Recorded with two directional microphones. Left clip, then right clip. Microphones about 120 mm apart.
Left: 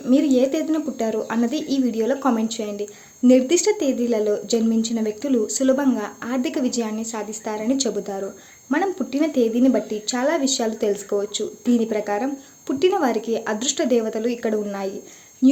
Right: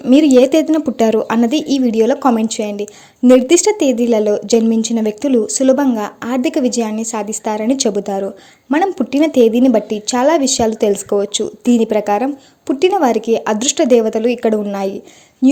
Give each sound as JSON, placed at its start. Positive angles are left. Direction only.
{"t": 0.1, "sound": "speech", "side_deg": -90}
{"t": 12.6, "sound": "speech", "side_deg": -60}